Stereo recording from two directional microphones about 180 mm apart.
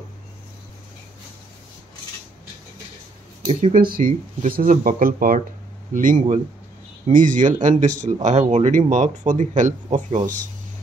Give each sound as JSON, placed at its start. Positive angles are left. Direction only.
{"t": 3.9, "sound": "speech", "side_deg": -50}